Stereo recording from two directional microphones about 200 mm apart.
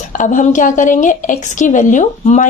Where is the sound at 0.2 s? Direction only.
40° left (ahead or behind).